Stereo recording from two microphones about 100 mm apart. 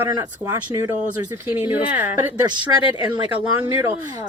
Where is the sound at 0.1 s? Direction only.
40° right (ahead or behind).